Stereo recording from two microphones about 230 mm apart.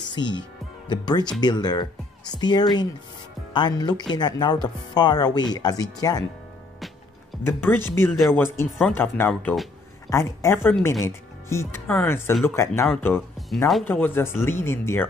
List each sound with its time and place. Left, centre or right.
0.1 s speech: centre
7.4 s speech: centre